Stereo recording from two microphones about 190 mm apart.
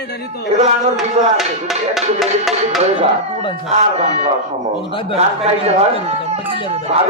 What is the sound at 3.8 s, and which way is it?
Speech, 35° right (ahead or behind).